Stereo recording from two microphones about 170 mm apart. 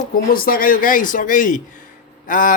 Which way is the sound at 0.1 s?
60° left (ahead or behind).